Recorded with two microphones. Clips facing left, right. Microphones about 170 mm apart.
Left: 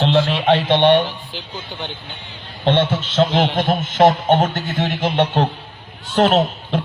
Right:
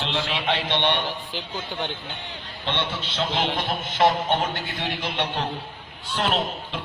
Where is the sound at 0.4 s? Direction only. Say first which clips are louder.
Left 10 dB; 50° left (ahead or behind).